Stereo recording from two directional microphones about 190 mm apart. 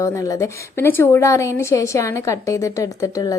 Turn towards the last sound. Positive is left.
turn(degrees=15)  # may be behind; listen again after turning